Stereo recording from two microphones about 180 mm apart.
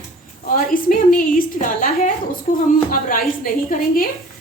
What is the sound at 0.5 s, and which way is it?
A woman's voice, 50° left (ahead or behind).